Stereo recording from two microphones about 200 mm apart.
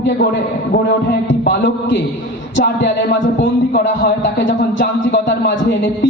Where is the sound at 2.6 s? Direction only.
50° left (ahead or behind).